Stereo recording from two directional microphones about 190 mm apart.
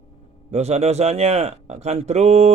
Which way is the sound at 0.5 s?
35° right (ahead or behind).